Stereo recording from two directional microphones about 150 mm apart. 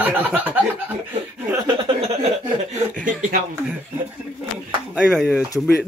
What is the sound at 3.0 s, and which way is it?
Speech, 60° right (ahead or behind).